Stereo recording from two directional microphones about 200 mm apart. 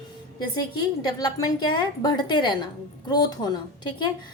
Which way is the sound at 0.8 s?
20° left (ahead or behind).